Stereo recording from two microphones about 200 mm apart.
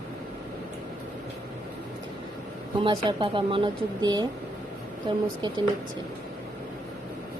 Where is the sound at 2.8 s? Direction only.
25° right (ahead or behind).